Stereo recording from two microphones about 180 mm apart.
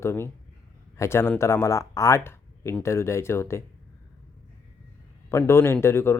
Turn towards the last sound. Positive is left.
turn(degrees=15)  # may be behind; listen again after turning